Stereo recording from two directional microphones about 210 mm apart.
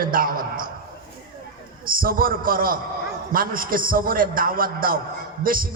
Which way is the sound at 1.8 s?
45° right (ahead or behind).